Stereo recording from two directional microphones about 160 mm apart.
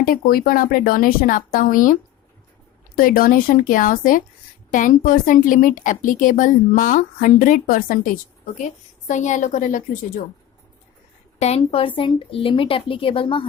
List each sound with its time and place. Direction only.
0.0 s a woman's voice: 65° left (ahead or behind)
11.3 s speech: 40° left (ahead or behind)